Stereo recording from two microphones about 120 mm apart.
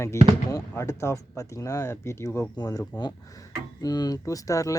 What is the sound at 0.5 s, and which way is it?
Speech, 25° left (ahead or behind).